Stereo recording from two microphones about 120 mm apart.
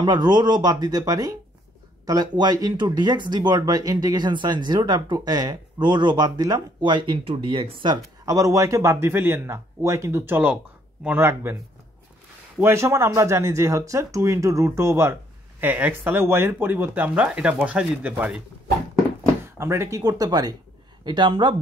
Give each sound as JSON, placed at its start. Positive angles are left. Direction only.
{"t": 0.0, "sound": "speech", "side_deg": -40}
{"t": 8.3, "sound": "speech", "side_deg": -30}
{"t": 12.5, "sound": "speech", "side_deg": -20}
{"t": 19.4, "sound": "speech", "side_deg": -20}